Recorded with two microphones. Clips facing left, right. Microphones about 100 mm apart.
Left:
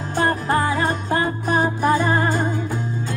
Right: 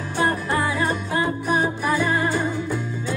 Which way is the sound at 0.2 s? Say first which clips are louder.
Left 2 dB; 45° left (ahead or behind).